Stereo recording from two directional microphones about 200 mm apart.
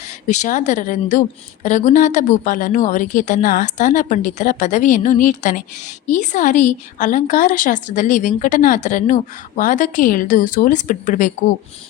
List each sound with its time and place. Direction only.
0.0 s a woman's voice: 35° left (ahead or behind)